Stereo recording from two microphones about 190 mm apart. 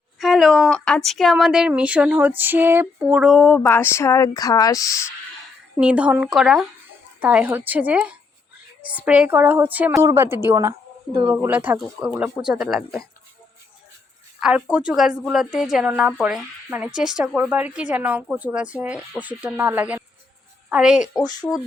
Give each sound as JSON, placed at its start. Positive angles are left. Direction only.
{"t": 0.2, "sound": "speech", "side_deg": 0}
{"t": 5.7, "sound": "a woman's voice", "side_deg": -5}
{"t": 14.3, "sound": "a woman's voice", "side_deg": -5}
{"t": 21.4, "sound": "speech", "side_deg": 10}